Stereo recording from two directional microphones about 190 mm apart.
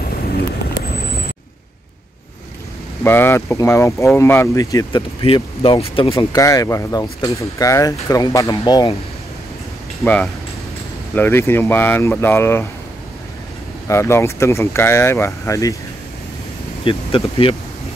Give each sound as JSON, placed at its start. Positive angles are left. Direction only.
{"t": 3.0, "sound": "speech", "side_deg": 10}
{"t": 5.2, "sound": "speech", "side_deg": 30}
{"t": 6.1, "sound": "speech", "side_deg": 15}
{"t": 10.0, "sound": "speech", "side_deg": 5}
{"t": 13.8, "sound": "speech", "side_deg": 15}
{"t": 16.8, "sound": "speech", "side_deg": 30}